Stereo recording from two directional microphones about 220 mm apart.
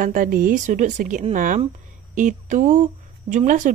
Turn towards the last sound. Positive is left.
turn(degrees=-35)  # may be behind; listen again after turning